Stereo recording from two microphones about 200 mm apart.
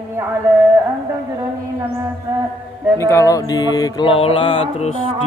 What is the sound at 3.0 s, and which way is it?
Mantra, 15° left (ahead or behind).